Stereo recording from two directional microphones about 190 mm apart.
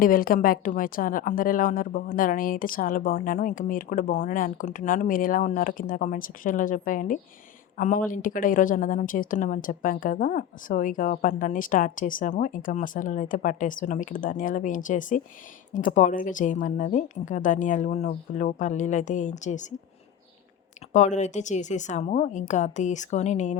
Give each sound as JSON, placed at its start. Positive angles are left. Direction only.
{"t": 0.0, "sound": "a woman's voice", "side_deg": 50}
{"t": 20.9, "sound": "a woman's voice", "side_deg": 40}